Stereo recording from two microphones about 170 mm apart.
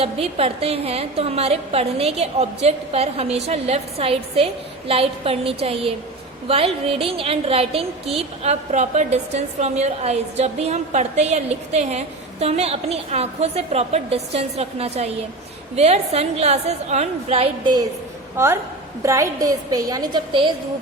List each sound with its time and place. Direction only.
0.0 s a woman's voice: 35° right (ahead or behind)
18.3 s a woman's voice: 15° right (ahead or behind)